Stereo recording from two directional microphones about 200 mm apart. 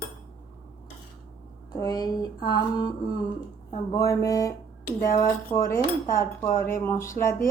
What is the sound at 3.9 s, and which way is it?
Cutlery, 15° left (ahead or behind).